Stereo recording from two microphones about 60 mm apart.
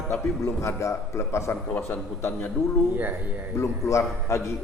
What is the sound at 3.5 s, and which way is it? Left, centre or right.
Speech, left.